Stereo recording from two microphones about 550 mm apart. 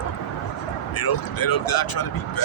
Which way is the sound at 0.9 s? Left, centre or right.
Left.